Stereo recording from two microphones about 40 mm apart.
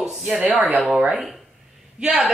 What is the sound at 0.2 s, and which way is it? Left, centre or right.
Speech, right.